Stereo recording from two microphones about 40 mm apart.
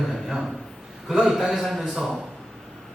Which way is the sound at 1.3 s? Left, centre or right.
Centre.